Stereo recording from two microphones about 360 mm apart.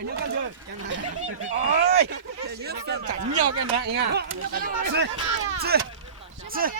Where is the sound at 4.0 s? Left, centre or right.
Right.